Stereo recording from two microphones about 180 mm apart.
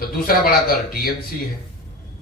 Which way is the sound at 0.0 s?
55° left (ahead or behind).